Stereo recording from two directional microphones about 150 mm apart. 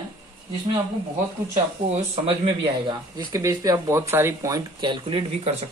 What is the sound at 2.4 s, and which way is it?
Speech, 35° right (ahead or behind).